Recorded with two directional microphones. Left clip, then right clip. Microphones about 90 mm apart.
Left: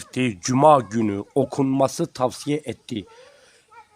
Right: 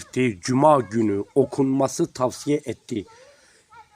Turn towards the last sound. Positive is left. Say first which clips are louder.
# right 1 dB
turn(degrees=15)  # may be behind; listen again after turning